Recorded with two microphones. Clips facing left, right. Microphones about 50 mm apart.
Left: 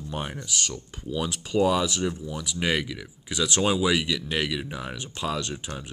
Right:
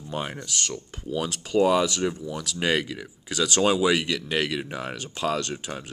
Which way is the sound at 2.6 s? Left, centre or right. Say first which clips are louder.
Right 2 dB; centre.